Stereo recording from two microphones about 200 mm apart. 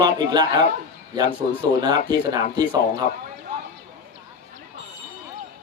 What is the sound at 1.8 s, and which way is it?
Speech, 20° right (ahead or behind).